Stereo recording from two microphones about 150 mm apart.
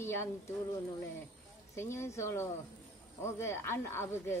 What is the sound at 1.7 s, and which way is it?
Speech, 15° left (ahead or behind).